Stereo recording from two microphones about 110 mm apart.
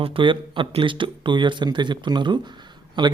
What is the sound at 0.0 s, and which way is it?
Speech, 55° right (ahead or behind).